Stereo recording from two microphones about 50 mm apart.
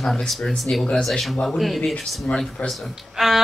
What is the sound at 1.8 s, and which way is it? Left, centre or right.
Speech, centre.